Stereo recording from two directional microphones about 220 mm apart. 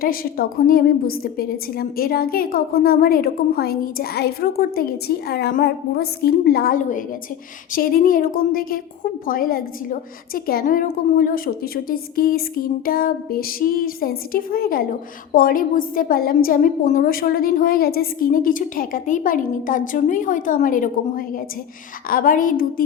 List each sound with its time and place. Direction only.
0.0 s a woman's voice: 40° left (ahead or behind)